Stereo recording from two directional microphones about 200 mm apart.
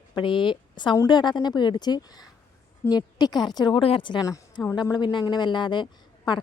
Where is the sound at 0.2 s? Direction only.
25° left (ahead or behind).